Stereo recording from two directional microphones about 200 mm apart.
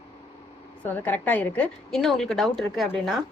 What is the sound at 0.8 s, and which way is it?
A woman's voice, 10° left (ahead or behind).